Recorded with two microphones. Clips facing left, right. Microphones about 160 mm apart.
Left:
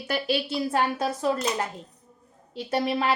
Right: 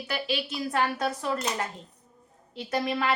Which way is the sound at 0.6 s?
30° left (ahead or behind).